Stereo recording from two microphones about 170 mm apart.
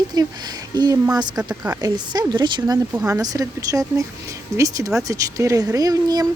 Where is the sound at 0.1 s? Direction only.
25° right (ahead or behind).